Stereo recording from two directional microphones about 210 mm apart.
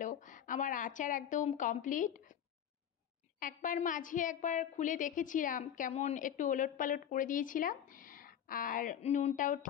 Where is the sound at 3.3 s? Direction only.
40° left (ahead or behind).